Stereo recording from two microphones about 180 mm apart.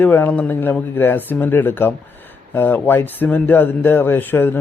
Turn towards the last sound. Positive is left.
turn(degrees=10)  # may be behind; listen again after turning